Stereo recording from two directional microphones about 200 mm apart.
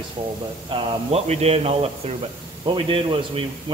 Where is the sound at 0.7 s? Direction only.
30° right (ahead or behind).